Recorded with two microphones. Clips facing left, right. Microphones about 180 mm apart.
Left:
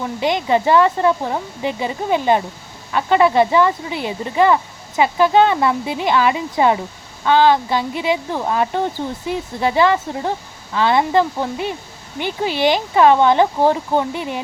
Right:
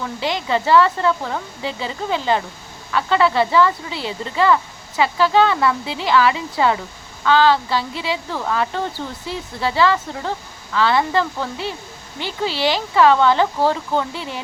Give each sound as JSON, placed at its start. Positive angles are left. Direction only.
{"t": 0.0, "sound": "speech", "side_deg": 20}